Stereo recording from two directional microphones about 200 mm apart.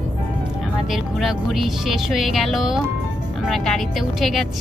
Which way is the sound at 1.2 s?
Centre (ahead or behind).